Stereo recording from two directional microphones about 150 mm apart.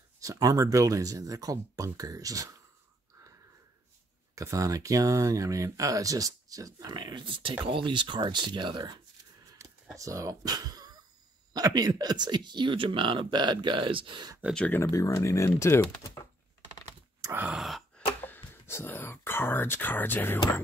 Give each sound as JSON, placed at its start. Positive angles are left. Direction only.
{"t": 0.2, "sound": "speech", "side_deg": -25}
{"t": 4.4, "sound": "speech", "side_deg": -20}
{"t": 14.5, "sound": "speech", "side_deg": 10}
{"t": 17.2, "sound": "a sound", "side_deg": -15}
{"t": 17.5, "sound": "sigh", "side_deg": 0}
{"t": 18.2, "sound": "speech", "side_deg": 15}